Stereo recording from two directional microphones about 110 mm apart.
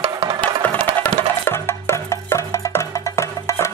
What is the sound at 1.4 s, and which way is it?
Music, 20° left (ahead or behind).